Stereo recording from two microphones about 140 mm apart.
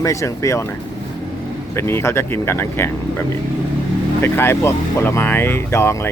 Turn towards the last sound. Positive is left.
turn(degrees=20)  # may be behind; listen again after turning